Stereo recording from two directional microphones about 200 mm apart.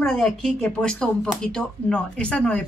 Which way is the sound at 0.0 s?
Centre (ahead or behind).